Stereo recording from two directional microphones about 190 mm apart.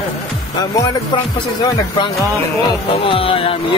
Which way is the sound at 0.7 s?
20° left (ahead or behind).